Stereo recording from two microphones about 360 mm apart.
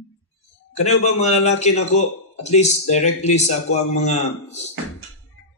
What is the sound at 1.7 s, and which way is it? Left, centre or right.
Speech, left.